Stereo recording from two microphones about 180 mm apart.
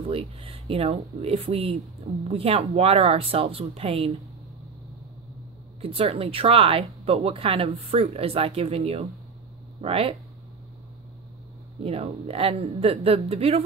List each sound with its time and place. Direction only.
0.1 s speech: 30° right (ahead or behind)
5.8 s speech: 30° right (ahead or behind)
11.8 s speech: 35° right (ahead or behind)